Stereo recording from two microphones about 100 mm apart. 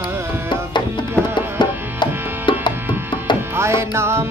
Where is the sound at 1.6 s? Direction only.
55° left (ahead or behind).